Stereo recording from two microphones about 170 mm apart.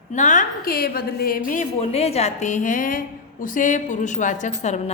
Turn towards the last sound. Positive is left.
turn(degrees=40)  # may be behind; listen again after turning